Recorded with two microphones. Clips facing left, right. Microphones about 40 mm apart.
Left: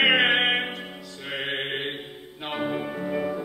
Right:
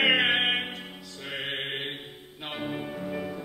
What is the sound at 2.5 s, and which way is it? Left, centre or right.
Music, centre.